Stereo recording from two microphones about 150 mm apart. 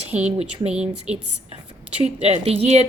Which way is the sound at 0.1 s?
10° right (ahead or behind).